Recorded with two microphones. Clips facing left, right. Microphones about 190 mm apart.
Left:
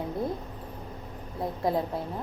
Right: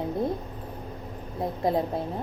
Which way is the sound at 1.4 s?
20° right (ahead or behind).